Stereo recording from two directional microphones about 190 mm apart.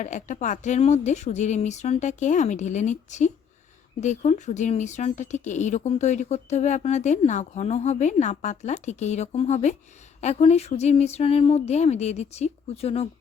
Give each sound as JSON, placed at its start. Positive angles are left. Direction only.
{"t": 0.0, "sound": "speech", "side_deg": 40}